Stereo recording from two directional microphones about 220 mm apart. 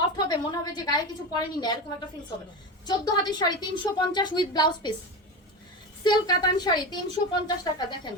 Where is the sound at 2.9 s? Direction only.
20° left (ahead or behind).